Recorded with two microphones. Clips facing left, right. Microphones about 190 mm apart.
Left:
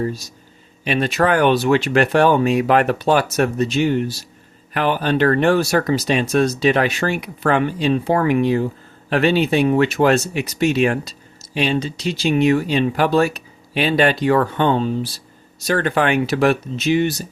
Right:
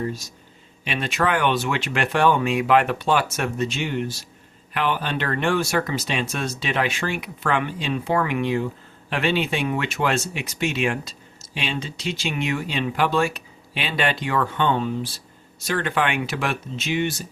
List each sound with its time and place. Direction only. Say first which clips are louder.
0.9 s speech: left 6 dB; 40° left (ahead or behind)